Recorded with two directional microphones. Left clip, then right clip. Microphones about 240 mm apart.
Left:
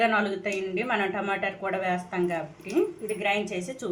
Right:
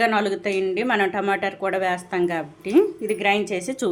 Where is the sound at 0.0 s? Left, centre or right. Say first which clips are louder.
Right 4 dB; right.